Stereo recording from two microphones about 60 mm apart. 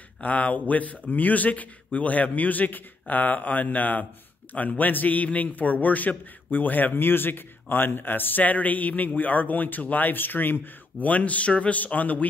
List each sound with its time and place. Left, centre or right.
0.2 s a man's voice: left